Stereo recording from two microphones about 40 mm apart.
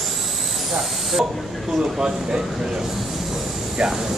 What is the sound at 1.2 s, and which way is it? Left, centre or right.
Speech, centre.